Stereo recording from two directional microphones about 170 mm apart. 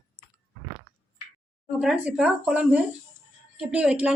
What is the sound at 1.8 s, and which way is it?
A woman's voice, 5° right (ahead or behind).